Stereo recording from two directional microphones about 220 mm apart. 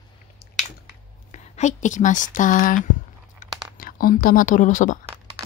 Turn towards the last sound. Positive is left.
turn(degrees=35)  # may be behind; listen again after turning